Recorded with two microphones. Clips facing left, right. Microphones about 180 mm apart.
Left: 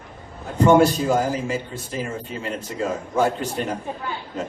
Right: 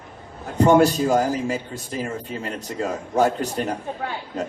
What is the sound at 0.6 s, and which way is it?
A man's voice, 40° right (ahead or behind).